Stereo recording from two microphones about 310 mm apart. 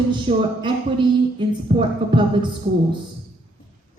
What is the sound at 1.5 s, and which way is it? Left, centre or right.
Speech, centre.